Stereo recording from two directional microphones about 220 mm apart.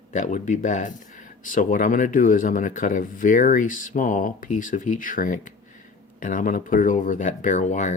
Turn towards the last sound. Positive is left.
turn(degrees=35)  # may be behind; listen again after turning